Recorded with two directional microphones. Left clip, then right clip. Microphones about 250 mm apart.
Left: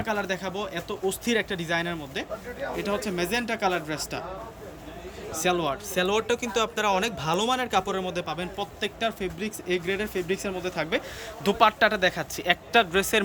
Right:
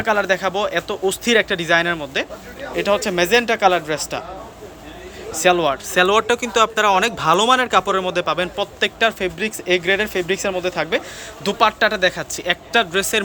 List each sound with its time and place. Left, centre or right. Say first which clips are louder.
0.0 s speech: right 11 dB; centre
5.3 s speech: right 10 dB; centre